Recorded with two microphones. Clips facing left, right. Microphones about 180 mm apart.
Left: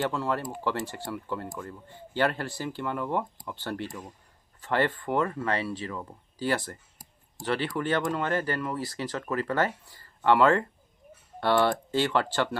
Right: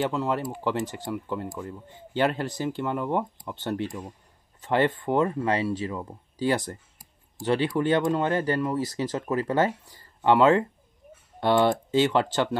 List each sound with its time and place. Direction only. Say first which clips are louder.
0.1 s speech: right 3 dB; 20° right (ahead or behind)